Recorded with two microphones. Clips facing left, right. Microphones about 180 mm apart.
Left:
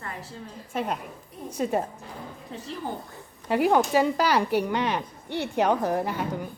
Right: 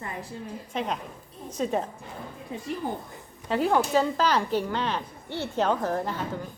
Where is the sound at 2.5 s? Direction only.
10° right (ahead or behind).